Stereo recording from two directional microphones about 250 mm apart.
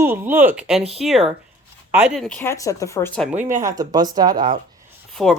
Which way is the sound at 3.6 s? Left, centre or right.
Centre.